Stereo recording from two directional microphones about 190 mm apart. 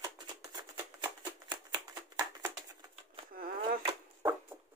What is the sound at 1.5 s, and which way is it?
Shuffling cards, 20° right (ahead or behind).